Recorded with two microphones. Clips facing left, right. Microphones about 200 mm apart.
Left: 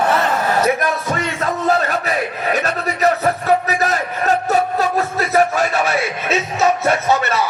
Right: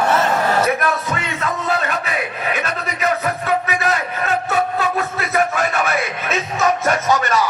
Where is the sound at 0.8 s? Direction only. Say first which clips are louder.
Left 1 dB; 40° left (ahead or behind).